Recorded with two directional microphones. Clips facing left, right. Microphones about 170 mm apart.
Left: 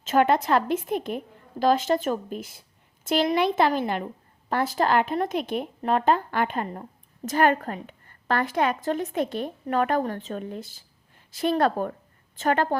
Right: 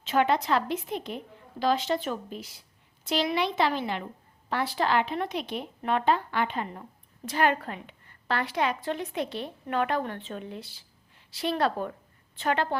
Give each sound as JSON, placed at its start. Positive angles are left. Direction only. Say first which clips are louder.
{"t": 0.0, "sound": "a woman's voice", "louder": "left 4 dB", "side_deg": 45}